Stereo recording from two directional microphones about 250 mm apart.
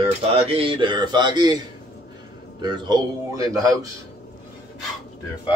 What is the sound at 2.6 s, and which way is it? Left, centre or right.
A man's voice, centre.